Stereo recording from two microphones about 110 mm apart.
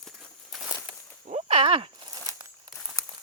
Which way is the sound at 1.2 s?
90° right.